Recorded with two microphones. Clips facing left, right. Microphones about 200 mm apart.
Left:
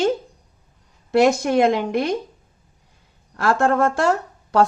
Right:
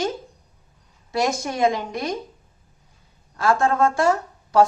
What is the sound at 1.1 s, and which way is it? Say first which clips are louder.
Speech: left 8 dB; 60° left (ahead or behind).